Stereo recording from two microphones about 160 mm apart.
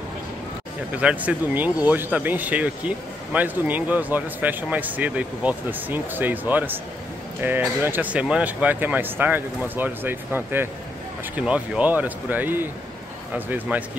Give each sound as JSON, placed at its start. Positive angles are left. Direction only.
{"t": 0.9, "sound": "a man's voice", "side_deg": -10}